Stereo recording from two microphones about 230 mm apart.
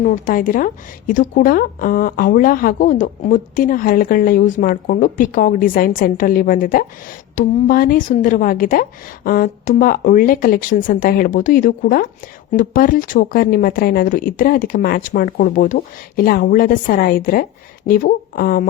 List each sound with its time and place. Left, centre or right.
0.0 s a woman's voice: left